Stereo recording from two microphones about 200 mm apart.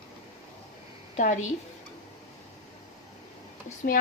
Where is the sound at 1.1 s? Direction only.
35° left (ahead or behind).